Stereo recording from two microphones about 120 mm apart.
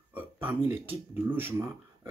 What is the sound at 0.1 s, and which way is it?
Speech, 15° right (ahead or behind).